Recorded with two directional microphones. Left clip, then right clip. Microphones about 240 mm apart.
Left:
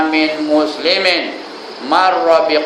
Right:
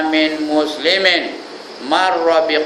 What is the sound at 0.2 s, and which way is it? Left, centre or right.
A man's voice, centre.